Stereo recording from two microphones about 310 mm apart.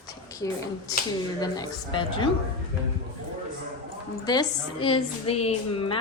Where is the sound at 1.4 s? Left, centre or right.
Centre.